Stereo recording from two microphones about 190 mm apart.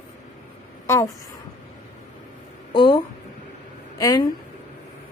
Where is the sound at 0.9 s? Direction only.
15° left (ahead or behind).